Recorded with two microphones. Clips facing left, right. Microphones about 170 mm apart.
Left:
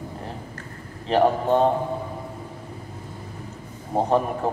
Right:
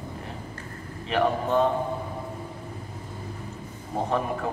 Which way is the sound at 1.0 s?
35° left (ahead or behind).